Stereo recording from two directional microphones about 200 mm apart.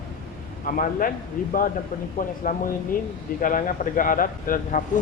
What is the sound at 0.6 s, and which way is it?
Speech, 45° left (ahead or behind).